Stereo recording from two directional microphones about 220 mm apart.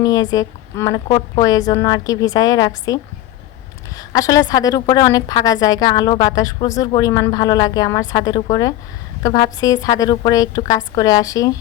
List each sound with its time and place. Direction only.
0.0 s a woman's voice: 15° left (ahead or behind)
4.1 s a woman's voice: 15° left (ahead or behind)